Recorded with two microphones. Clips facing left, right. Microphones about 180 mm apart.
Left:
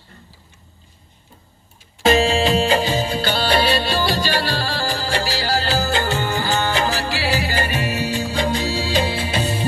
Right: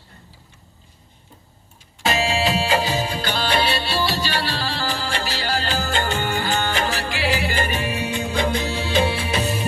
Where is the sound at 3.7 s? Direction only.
45° left (ahead or behind).